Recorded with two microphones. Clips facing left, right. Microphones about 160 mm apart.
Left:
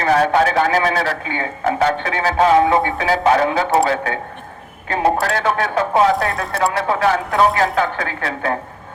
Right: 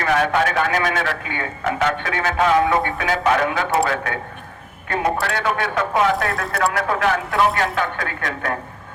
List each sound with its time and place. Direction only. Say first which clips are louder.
0.0 s speech: left 4 dB; 35° left (ahead or behind)
5.2 s speech: left 3 dB; 40° left (ahead or behind)